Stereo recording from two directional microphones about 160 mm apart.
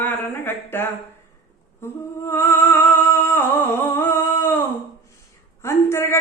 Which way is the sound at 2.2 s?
15° left (ahead or behind).